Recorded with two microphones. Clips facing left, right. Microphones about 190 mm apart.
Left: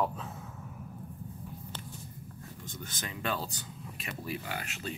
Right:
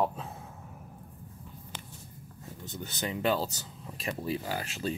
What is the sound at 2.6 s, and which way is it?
Speech, 25° right (ahead or behind).